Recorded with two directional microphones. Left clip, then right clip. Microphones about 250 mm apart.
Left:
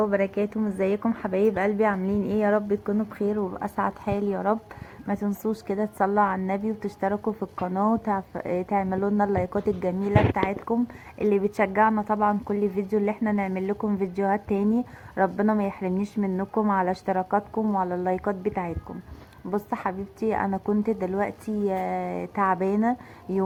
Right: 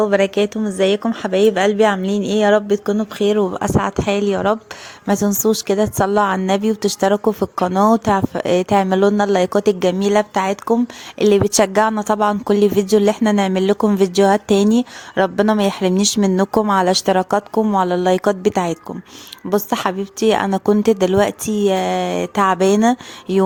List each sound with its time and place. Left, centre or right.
0.6 s a woman's voice: right
5.0 s a woman's voice: right